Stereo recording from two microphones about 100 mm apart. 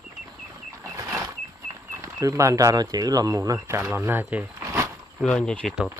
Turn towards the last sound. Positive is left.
turn(degrees=10)  # may be behind; listen again after turning